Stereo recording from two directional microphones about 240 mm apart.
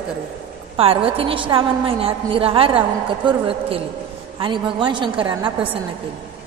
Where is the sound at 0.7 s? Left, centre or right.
Right.